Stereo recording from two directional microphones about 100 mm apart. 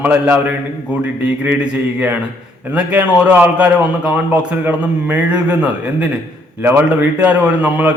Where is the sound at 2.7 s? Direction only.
15° right (ahead or behind).